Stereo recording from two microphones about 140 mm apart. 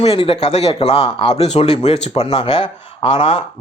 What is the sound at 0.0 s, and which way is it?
Speech, 45° left (ahead or behind).